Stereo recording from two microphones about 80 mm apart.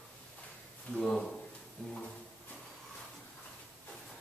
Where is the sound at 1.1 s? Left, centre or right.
Centre.